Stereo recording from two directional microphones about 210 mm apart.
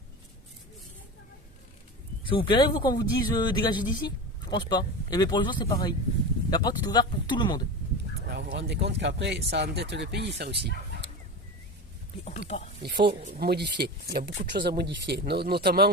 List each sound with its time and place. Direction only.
2.3 s speech: 20° left (ahead or behind)
8.3 s speech: 50° right (ahead or behind)
12.2 s speech: 35° left (ahead or behind)
12.8 s speech: 50° right (ahead or behind)